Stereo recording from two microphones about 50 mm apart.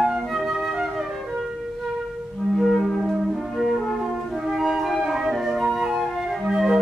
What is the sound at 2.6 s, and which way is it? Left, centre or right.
Music, centre.